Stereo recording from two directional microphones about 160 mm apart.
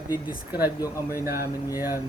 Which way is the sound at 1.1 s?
15° right (ahead or behind).